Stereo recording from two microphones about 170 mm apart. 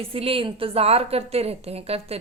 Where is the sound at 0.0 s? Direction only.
35° right (ahead or behind).